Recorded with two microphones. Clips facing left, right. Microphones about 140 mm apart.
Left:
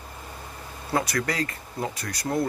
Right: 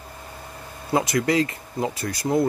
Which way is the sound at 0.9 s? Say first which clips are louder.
Right 5 dB; 20° right (ahead or behind).